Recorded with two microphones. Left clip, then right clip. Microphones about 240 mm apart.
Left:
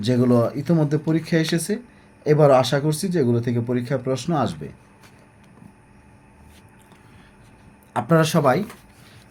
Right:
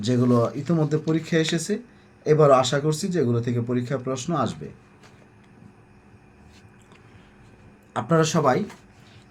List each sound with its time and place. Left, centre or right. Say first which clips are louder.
0.0 s speech: left 2 dB; left
7.9 s speech: left 2 dB; left